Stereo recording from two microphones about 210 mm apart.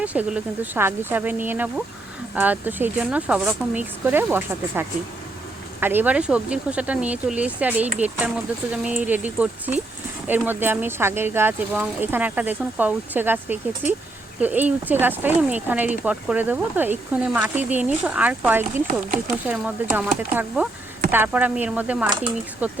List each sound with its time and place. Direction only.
0.0 s speech: 5° right (ahead or behind)